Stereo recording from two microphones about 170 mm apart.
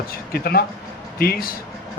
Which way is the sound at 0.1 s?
65° left (ahead or behind).